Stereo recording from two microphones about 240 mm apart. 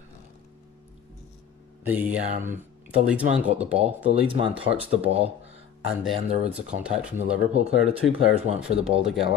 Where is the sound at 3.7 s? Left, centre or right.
Right.